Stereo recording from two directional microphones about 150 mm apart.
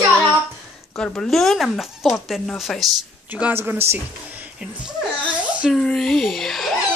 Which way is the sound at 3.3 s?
15° right (ahead or behind).